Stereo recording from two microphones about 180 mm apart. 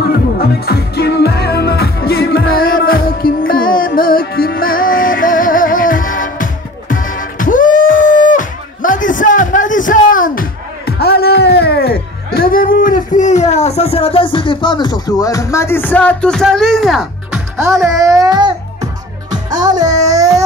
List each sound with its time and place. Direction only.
0.4 s music: 60° left (ahead or behind)
12.4 s speech: 55° left (ahead or behind); by 17.9 s centre (ahead or behind)
17.9 s music: 20° right (ahead or behind)
19.5 s a sound: 25° right (ahead or behind)